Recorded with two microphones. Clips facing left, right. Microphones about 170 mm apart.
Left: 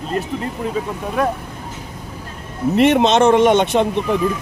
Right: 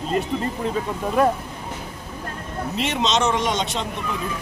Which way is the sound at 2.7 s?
60° left (ahead or behind).